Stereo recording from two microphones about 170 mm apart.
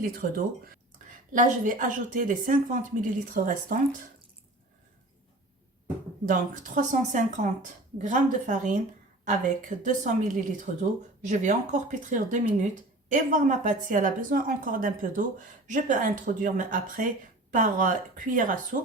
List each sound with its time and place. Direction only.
0.0 s a woman's voice: 55° right (ahead or behind)
6.2 s a woman's voice: 50° right (ahead or behind)